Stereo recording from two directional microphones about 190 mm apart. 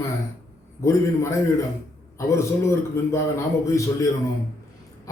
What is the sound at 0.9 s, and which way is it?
A man's voice, 15° left (ahead or behind).